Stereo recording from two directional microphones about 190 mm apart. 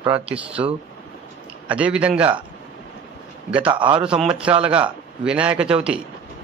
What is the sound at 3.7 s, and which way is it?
Speech, 25° right (ahead or behind).